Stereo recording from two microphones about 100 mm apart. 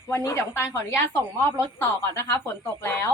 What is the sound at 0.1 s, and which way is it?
A woman's voice, 30° left (ahead or behind).